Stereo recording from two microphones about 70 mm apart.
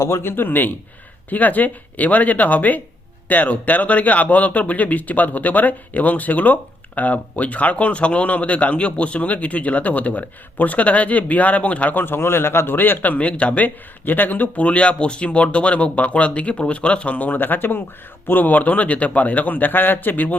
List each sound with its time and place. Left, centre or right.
0.0 s speech: left